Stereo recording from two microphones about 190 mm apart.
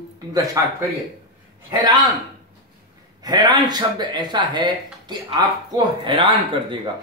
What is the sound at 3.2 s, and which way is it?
Speech, 20° right (ahead or behind).